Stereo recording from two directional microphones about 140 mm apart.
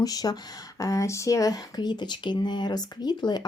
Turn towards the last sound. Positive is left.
turn(degrees=30)  # may be behind; listen again after turning